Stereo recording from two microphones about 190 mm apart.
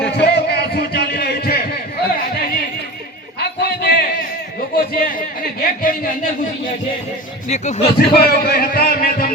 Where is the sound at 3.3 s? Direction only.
60° left (ahead or behind).